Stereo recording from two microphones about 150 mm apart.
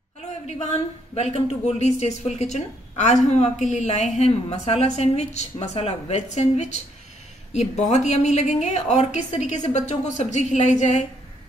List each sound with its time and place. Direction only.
0.5 s speech: 50° left (ahead or behind)